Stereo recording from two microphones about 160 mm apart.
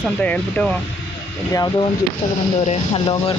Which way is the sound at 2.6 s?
40° left (ahead or behind).